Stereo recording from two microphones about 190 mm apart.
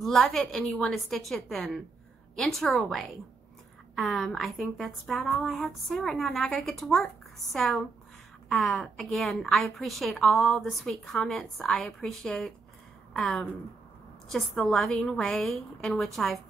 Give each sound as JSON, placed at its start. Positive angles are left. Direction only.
{"t": 0.0, "sound": "a woman's voice", "side_deg": 0}